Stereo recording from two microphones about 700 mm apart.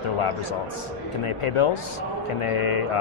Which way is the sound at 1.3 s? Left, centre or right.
Left.